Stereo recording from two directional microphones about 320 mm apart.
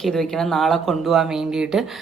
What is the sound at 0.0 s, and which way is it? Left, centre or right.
Speech, centre.